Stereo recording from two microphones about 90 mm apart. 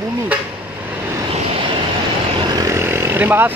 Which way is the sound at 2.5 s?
45° right (ahead or behind).